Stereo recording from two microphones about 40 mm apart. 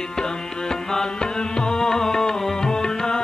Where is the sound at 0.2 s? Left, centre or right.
Centre.